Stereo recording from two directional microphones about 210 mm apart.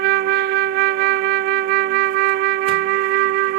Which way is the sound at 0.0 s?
50° right (ahead or behind).